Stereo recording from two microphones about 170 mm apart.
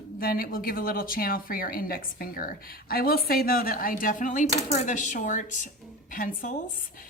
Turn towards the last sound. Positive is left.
turn(degrees=55)  # may be behind; listen again after turning